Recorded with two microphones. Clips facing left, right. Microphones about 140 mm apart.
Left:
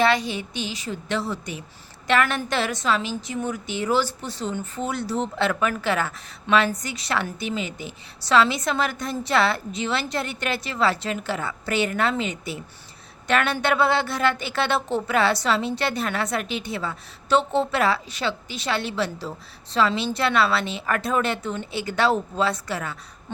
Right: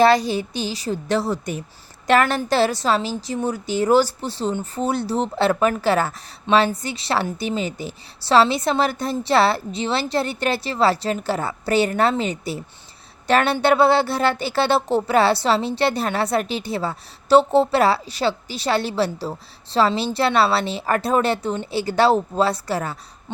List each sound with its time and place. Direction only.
0.0 s a woman's voice: 35° right (ahead or behind)